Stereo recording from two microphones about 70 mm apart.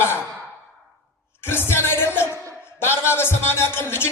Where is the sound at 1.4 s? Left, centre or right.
Left.